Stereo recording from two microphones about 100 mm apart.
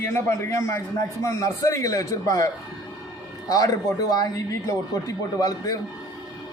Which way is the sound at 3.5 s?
35° left (ahead or behind).